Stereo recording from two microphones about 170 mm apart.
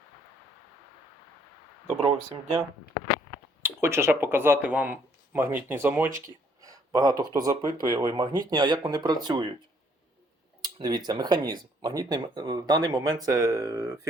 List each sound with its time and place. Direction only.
3.6 s speech: 15° right (ahead or behind)
6.1 s speech: 50° right (ahead or behind)
6.6 s speech: 20° right (ahead or behind)
10.6 s speech: 25° right (ahead or behind)